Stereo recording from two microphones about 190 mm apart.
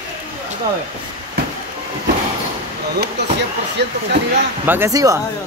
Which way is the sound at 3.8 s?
60° right (ahead or behind).